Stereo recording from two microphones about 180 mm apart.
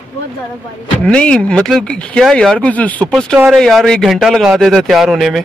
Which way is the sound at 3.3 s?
5° right (ahead or behind).